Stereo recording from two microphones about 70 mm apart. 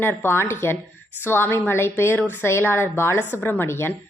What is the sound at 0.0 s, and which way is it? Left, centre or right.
Speech, left.